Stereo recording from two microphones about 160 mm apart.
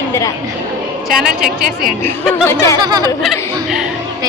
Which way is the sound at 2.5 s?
15° left (ahead or behind).